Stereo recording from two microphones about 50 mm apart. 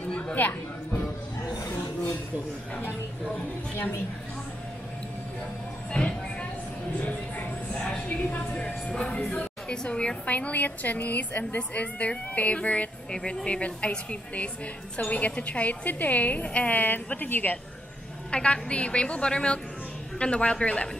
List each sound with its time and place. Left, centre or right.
0.1 s music: left
5.9 s vehicle: centre
7.0 s music: left
8.2 s vehicle: left
8.9 s a woman's voice: left
18.3 s a woman's voice: left